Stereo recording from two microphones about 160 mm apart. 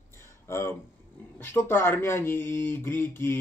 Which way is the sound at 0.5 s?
15° left (ahead or behind).